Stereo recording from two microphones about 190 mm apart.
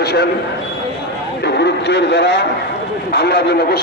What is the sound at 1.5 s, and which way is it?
A man's voice, 65° left (ahead or behind).